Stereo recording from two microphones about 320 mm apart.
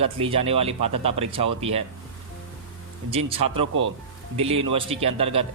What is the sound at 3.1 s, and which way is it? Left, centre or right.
Speech, centre.